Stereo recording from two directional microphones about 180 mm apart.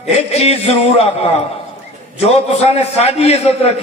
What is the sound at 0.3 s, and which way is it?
Speech, 35° left (ahead or behind).